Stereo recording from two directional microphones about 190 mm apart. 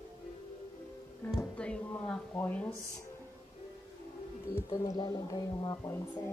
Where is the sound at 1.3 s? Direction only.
5° left (ahead or behind).